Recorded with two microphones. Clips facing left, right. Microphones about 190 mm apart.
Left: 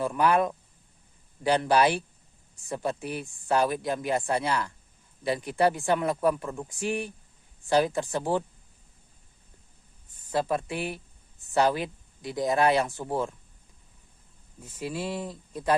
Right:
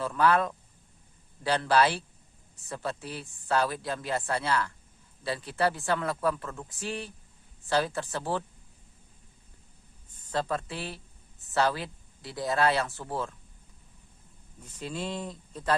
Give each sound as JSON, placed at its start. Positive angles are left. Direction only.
{"t": 0.0, "sound": "speech", "side_deg": 15}
{"t": 10.3, "sound": "speech", "side_deg": 15}
{"t": 14.6, "sound": "speech", "side_deg": 10}